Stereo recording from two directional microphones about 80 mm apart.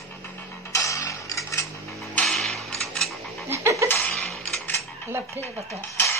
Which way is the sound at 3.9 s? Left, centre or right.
Left.